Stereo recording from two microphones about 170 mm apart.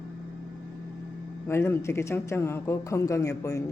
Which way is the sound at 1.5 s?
15° left (ahead or behind).